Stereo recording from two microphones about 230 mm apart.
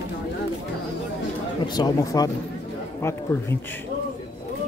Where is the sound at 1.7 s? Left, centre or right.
Centre.